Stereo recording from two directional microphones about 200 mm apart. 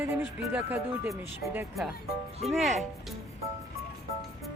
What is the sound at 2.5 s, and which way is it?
Speech, centre (ahead or behind).